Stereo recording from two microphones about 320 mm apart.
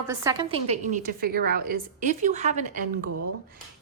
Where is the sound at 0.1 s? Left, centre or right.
Centre.